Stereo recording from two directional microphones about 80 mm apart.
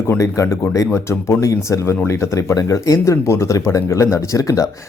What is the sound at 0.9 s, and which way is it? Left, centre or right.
Speech, left.